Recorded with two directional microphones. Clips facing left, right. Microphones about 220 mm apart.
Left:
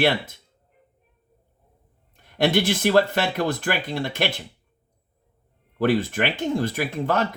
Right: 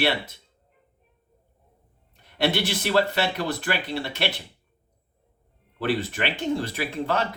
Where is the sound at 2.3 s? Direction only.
50° left (ahead or behind).